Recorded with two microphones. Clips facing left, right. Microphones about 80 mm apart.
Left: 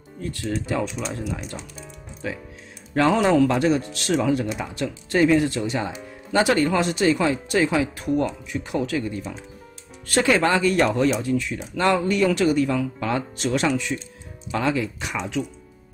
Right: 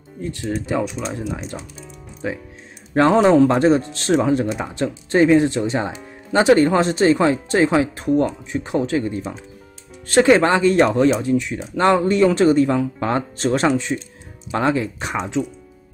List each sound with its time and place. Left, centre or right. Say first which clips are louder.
0.2 s speech: right 3 dB; right